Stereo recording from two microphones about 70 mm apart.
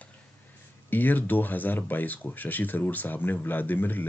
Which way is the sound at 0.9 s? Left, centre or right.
Left.